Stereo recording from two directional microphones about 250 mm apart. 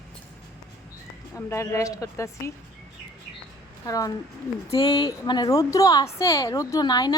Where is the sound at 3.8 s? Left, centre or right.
Centre.